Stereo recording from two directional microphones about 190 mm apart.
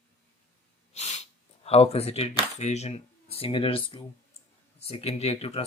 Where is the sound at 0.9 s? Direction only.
35° left (ahead or behind).